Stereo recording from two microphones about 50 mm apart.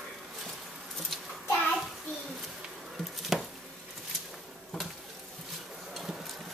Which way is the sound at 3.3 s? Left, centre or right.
Centre.